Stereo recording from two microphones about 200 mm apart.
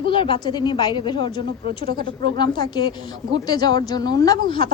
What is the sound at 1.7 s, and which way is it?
Speech, 50° right (ahead or behind).